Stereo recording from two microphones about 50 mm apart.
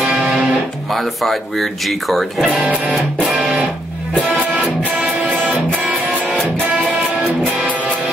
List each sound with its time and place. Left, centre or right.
0.0 s music: centre
0.9 s speech: centre
3.3 s music: centre
4.1 s music: left